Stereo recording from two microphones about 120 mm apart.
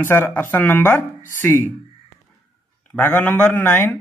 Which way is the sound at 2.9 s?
15° left (ahead or behind).